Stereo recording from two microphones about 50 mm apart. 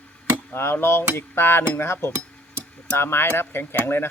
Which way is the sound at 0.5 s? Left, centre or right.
Left.